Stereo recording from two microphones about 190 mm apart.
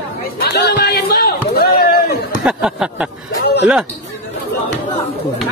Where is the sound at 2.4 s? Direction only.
5° right (ahead or behind).